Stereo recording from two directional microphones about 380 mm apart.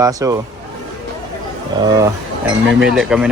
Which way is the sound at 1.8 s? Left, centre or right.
Centre.